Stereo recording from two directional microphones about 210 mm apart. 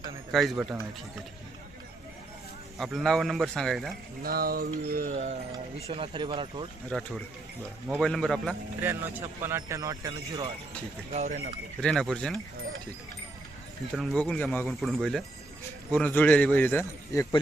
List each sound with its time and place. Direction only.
0.3 s speech: centre (ahead or behind)
2.7 s speech: centre (ahead or behind)
4.2 s a sound: 45° right (ahead or behind)
5.1 s speech: 30° right (ahead or behind)
6.9 s speech: 5° left (ahead or behind)
8.8 s a man's voice: 10° right (ahead or behind); by 11.3 s 30° right (ahead or behind)
11.8 s speech: 5° left (ahead or behind)
13.9 s a man's voice: centre (ahead or behind)